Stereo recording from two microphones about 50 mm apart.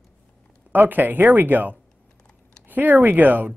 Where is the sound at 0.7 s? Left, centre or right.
Right.